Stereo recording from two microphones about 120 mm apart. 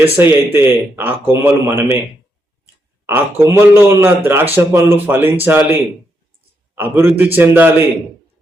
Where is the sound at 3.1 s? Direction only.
20° right (ahead or behind).